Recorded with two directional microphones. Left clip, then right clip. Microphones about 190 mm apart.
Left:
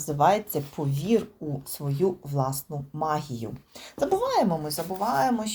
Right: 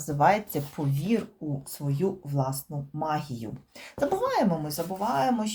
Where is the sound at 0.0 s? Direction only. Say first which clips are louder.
Left 1 dB; 15° left (ahead or behind).